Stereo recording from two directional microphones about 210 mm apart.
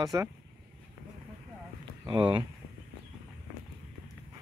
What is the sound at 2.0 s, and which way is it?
Speech, 25° right (ahead or behind).